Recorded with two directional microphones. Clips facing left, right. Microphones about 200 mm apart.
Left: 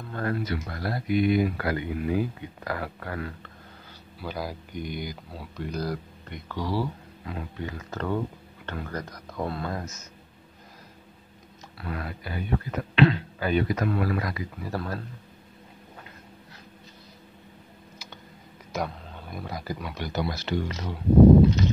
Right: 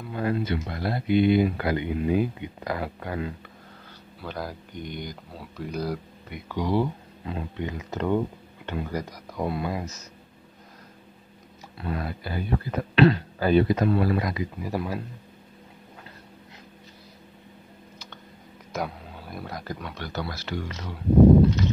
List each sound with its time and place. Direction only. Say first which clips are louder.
0.0 s a sound: right 3 dB; 15° right (ahead or behind)
0.4 s speech: right 3 dB; 25° right (ahead or behind)
4.2 s speech: left 1 dB; 5° left (ahead or behind); by 9.8 s 15° right (ahead or behind)
11.8 s speech: right 4 dB; 25° right (ahead or behind)
18.7 s speech: even; 5° right (ahead or behind); by 20.9 s 25° left (ahead or behind)